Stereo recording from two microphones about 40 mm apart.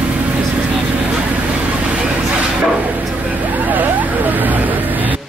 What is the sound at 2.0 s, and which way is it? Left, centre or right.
Bow-wow, right.